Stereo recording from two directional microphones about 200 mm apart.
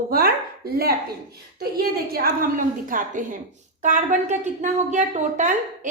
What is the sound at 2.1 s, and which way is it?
A woman's voice, 45° right (ahead or behind).